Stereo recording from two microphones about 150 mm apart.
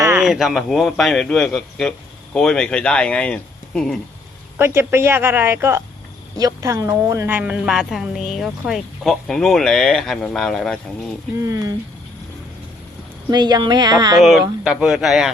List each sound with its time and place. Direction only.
0.2 s a woman's voice: centre (ahead or behind)
4.5 s a woman's voice: 15° right (ahead or behind); by 11.1 s 5° left (ahead or behind)
11.4 s speech: 20° right (ahead or behind)
13.3 s speech: 30° right (ahead or behind)
14.2 s a woman's voice: centre (ahead or behind)